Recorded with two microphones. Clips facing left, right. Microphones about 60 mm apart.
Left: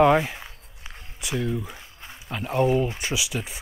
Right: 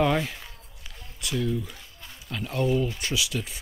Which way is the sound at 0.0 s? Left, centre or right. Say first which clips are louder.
Left 6 dB; left.